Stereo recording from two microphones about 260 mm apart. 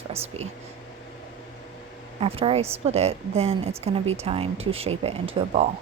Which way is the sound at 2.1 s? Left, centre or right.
Right.